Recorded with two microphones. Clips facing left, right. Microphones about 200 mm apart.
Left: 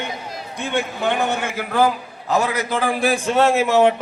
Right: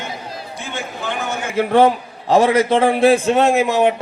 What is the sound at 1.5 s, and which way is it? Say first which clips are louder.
A man's voice: right 10 dB; 30° right (ahead or behind).